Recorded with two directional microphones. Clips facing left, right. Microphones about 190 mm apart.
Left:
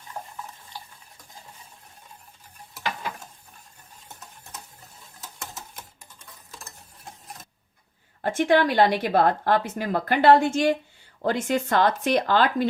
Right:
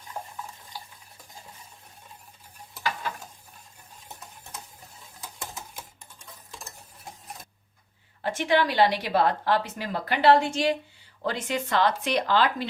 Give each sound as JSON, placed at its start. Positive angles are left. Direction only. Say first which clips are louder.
{"t": 0.1, "sound": "stir", "louder": "even", "side_deg": -10}
{"t": 8.2, "sound": "a woman's voice", "louder": "left 4 dB", "side_deg": 50}